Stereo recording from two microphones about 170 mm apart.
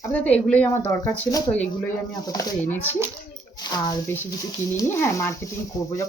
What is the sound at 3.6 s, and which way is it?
Speech, 25° left (ahead or behind).